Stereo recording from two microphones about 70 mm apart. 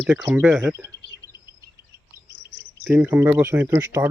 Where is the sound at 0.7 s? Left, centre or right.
Right.